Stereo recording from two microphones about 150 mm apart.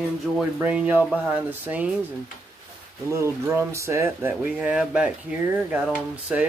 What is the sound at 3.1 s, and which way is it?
Speech, 20° right (ahead or behind).